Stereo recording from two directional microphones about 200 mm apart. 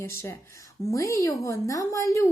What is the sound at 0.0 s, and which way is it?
A woman's voice, 10° left (ahead or behind).